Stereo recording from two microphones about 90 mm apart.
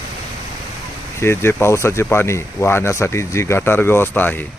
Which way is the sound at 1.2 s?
25° left (ahead or behind).